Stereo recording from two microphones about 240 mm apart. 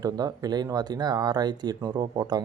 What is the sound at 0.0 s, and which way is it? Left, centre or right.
Speech, centre.